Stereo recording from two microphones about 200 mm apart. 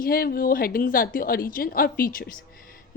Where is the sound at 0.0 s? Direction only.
45° left (ahead or behind).